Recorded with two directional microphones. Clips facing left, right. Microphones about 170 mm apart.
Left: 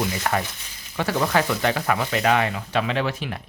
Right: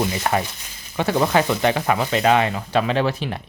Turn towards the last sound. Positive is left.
turn(degrees=-35)  # may be behind; listen again after turning